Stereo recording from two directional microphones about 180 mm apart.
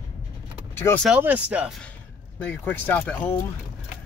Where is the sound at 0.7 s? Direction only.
15° left (ahead or behind).